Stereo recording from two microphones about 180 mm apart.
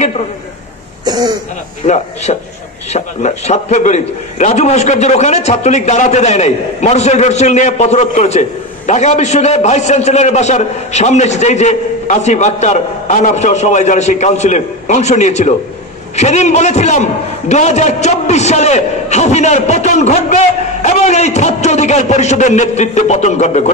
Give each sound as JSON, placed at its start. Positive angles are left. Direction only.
{"t": 1.0, "sound": "throat clearing", "side_deg": -25}
{"t": 1.8, "sound": "a man's voice", "side_deg": 35}